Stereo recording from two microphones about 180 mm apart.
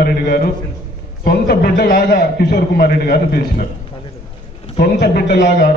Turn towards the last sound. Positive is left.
turn(degrees=60)  # may be behind; listen again after turning